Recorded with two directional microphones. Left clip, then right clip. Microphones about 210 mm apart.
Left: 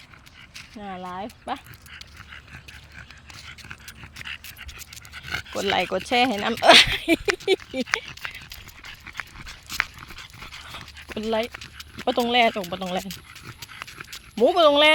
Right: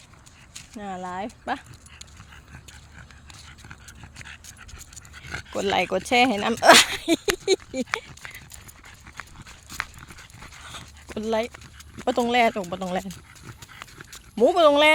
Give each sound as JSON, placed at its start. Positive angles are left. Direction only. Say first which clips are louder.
{"t": 0.7, "sound": "speech", "louder": "right 2 dB", "side_deg": -5}
{"t": 3.3, "sound": "dog", "louder": "left 6 dB", "side_deg": 0}
{"t": 4.3, "sound": "dog", "louder": "left 7 dB", "side_deg": -25}
{"t": 5.1, "sound": "speech", "louder": "left 2 dB", "side_deg": -10}
{"t": 7.4, "sound": "a sound", "louder": "left 1 dB", "side_deg": 5}
{"t": 8.4, "sound": "horse", "louder": "left 6 dB", "side_deg": -5}
{"t": 10.0, "sound": "dog", "louder": "left 4 dB", "side_deg": -5}
{"t": 11.5, "sound": "dog", "louder": "left 5 dB", "side_deg": -5}